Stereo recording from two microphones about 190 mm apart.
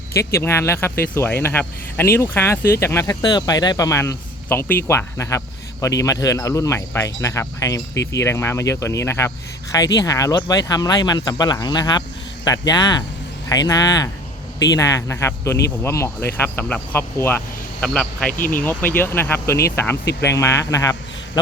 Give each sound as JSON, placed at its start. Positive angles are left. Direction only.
{"t": 0.3, "sound": "speech", "side_deg": 15}
{"t": 18.3, "sound": "speech", "side_deg": 45}
{"t": 18.6, "sound": "speech", "side_deg": 10}